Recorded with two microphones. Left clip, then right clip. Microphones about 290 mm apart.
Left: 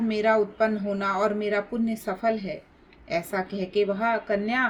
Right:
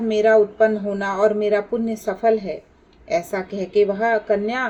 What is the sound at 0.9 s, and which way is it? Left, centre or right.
A woman's voice, left.